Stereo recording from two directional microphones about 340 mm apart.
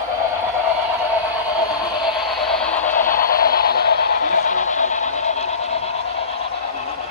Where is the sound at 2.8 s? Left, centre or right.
Left.